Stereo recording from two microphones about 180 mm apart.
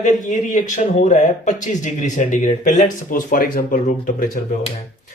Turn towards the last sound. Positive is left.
turn(degrees=45)  # may be behind; listen again after turning